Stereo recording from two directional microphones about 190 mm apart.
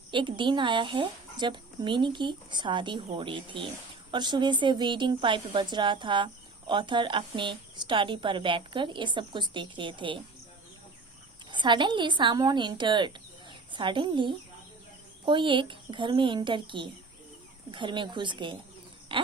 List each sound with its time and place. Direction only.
0.1 s a woman's voice: 25° right (ahead or behind)
11.5 s a woman's voice: 25° right (ahead or behind)
19.1 s a sound: 25° right (ahead or behind)